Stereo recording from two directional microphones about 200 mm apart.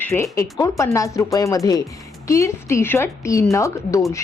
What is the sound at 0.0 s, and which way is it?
A woman's voice, 15° left (ahead or behind).